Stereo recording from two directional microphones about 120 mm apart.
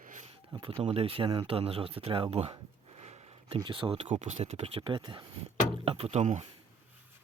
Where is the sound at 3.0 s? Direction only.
55° right (ahead or behind).